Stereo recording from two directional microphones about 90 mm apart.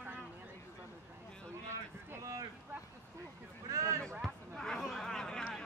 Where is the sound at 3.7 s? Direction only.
35° right (ahead or behind).